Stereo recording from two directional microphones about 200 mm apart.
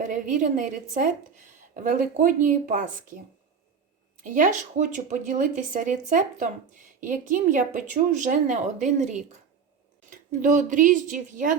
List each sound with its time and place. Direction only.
0.0 s speech: 40° right (ahead or behind)
4.2 s speech: 40° right (ahead or behind)